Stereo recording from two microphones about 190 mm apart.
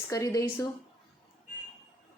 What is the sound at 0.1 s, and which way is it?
Speech, 15° left (ahead or behind).